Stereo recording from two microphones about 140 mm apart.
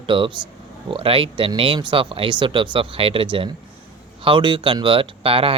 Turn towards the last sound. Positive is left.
turn(degrees=-40)  # may be behind; listen again after turning